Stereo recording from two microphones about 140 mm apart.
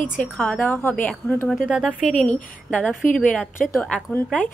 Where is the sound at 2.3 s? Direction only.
10° left (ahead or behind).